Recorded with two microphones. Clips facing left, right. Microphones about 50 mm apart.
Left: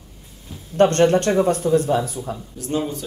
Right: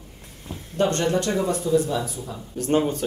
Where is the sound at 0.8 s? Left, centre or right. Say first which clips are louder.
Left 7 dB; left.